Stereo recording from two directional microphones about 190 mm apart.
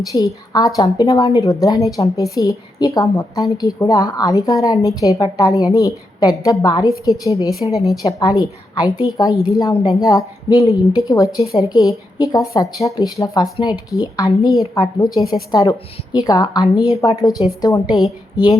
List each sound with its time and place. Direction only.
0.1 s a woman's voice: 20° left (ahead or behind)